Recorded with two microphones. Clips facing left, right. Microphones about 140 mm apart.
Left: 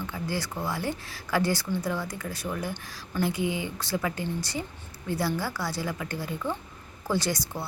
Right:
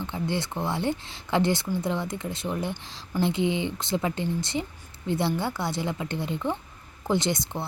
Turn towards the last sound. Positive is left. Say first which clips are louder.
# right 2 dB
turn(degrees=-20)  # may be behind; listen again after turning